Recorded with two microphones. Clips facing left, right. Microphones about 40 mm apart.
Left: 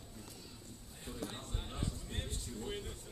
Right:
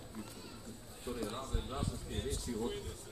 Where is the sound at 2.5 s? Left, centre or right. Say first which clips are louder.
Right 10 dB; right.